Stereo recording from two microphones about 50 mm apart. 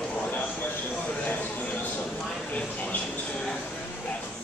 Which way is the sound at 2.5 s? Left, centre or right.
Left.